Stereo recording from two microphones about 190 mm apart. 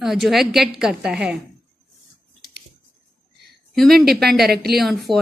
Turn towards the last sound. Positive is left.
turn(degrees=0)  # may be behind; listen again after turning